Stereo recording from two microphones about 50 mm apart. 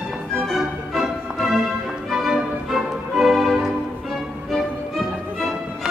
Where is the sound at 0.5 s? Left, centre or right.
Centre.